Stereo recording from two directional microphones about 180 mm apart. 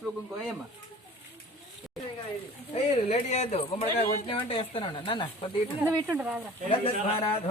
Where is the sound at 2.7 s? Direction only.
35° left (ahead or behind).